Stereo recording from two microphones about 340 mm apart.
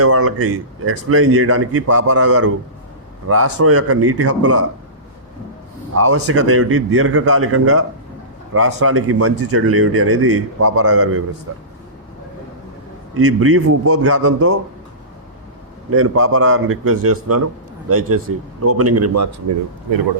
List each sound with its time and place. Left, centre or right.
0.0 s a man's voice: right
5.9 s speech: right
13.1 s speech: right
15.9 s a man's voice: right